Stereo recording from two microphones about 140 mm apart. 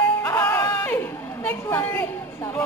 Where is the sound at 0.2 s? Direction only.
15° left (ahead or behind).